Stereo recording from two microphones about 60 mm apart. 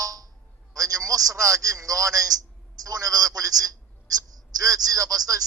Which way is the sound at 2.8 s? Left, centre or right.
Right.